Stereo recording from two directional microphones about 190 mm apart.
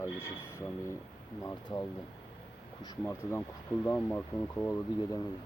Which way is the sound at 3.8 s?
10° left (ahead or behind).